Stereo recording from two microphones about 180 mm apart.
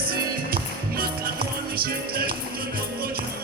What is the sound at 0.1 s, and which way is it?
Music, 55° right (ahead or behind).